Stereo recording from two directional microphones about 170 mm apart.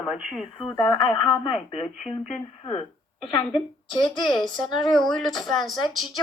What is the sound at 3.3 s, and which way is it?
Speech, 30° left (ahead or behind).